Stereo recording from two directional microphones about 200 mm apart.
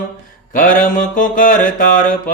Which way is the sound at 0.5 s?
45° left (ahead or behind).